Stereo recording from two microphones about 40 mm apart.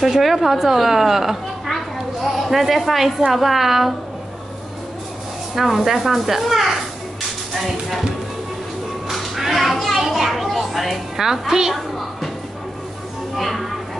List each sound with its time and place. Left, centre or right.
0.0 s a woman's voice: centre
5.5 s speech: centre
9.1 s children playing: centre
9.9 s children playing: centre
11.1 s a woman's voice: centre
13.4 s speech: centre